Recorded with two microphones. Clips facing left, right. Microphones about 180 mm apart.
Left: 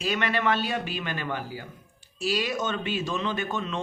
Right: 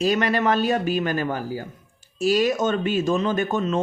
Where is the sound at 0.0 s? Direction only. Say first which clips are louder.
Right 6 dB; 40° right (ahead or behind).